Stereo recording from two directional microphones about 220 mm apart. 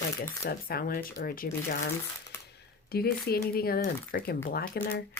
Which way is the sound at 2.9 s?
45° left (ahead or behind).